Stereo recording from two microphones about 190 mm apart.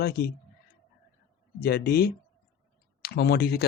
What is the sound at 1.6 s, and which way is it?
Speech, 55° left (ahead or behind).